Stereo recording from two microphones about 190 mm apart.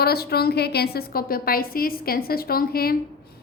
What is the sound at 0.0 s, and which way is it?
A woman's voice, 55° left (ahead or behind).